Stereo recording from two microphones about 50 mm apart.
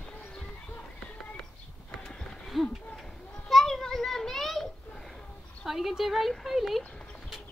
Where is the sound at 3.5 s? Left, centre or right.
Centre.